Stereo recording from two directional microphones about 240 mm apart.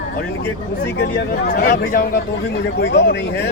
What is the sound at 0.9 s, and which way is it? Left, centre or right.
Speech, left.